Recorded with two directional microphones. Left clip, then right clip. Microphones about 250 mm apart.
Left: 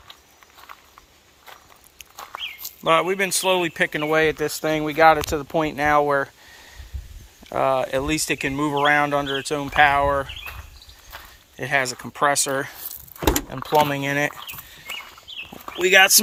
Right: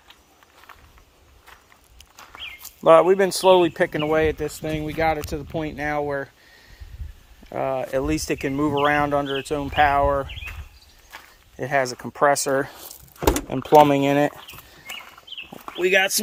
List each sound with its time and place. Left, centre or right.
2.8 s speech: right; by 6.3 s centre
7.4 s speech: centre
11.6 s speech: centre
13.1 s speech: right
15.8 s speech: centre